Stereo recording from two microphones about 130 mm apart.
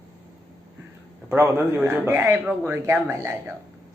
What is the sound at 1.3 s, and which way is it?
Speech, 15° right (ahead or behind).